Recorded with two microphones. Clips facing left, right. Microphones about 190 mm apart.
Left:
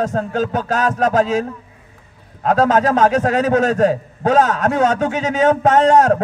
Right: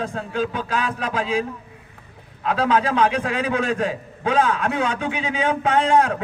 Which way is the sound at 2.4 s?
45° left (ahead or behind).